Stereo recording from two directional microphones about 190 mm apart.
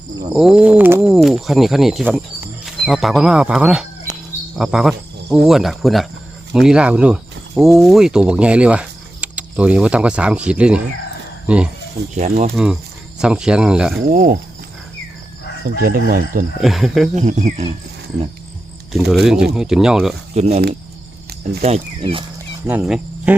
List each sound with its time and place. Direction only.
0.3 s speech: 5° right (ahead or behind)
12.1 s speech: 40° right (ahead or behind)
12.5 s speech: centre (ahead or behind)
14.1 s speech: 45° right (ahead or behind)
15.8 s speech: 50° right (ahead or behind)
16.6 s speech: centre (ahead or behind)
17.2 s speech: 35° right (ahead or behind)
18.9 s speech: centre (ahead or behind)
20.3 s speech: 35° right (ahead or behind)
21.6 s speech: 30° right (ahead or behind)
22.6 s speech: 5° right (ahead or behind)